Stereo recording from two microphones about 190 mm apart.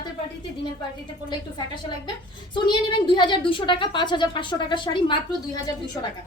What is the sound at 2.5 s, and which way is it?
A woman's voice, 25° left (ahead or behind).